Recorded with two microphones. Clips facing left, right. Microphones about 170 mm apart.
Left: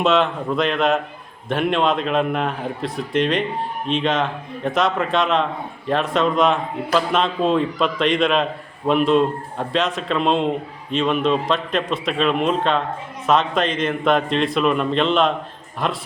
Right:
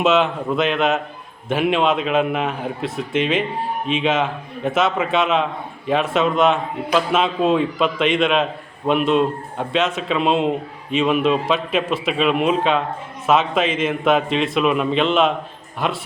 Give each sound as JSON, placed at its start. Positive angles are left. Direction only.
{"t": 0.0, "sound": "a man's voice", "side_deg": -5}